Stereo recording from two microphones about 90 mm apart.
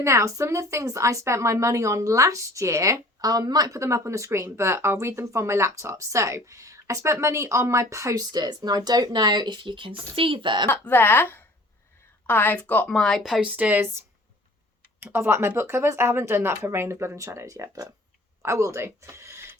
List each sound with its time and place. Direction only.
0.0 s a woman's voice: 35° right (ahead or behind)
8.3 s speech: 50° right (ahead or behind)
10.7 s a woman's voice: 20° left (ahead or behind)
12.9 s speech: 5° left (ahead or behind)
13.4 s speech: 20° right (ahead or behind)
15.0 s speech: 25° right (ahead or behind)